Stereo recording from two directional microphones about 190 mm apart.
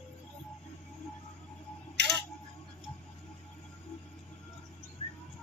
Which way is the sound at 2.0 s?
65° right (ahead or behind).